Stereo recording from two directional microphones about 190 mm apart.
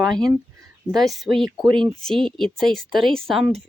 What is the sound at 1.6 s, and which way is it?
Speech, 25° right (ahead or behind).